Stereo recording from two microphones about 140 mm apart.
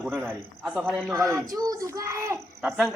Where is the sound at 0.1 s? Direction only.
10° right (ahead or behind).